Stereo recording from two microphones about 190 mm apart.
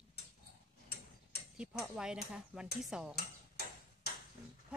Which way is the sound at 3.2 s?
55° left (ahead or behind).